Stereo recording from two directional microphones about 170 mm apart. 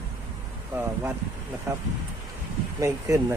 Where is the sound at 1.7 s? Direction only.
15° right (ahead or behind).